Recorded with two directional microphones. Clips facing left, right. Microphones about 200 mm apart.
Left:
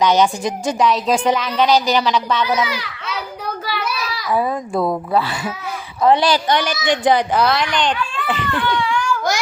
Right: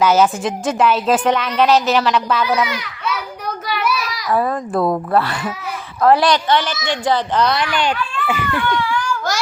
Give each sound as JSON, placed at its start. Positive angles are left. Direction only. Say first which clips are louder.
{"t": 0.0, "sound": "a woman's voice", "louder": "right 1 dB", "side_deg": -5}
{"t": 2.6, "sound": "a child's voice", "louder": "even", "side_deg": 30}
{"t": 3.7, "sound": "a sound", "louder": "right 6 dB", "side_deg": 25}
{"t": 4.3, "sound": "a woman's voice", "louder": "right 1 dB", "side_deg": 0}
{"t": 6.5, "sound": "a child's voice", "louder": "left 1 dB", "side_deg": 15}
{"t": 7.5, "sound": "a child's voice", "louder": "even", "side_deg": -5}
{"t": 8.9, "sound": "a sound", "louder": "left 1 dB", "side_deg": 15}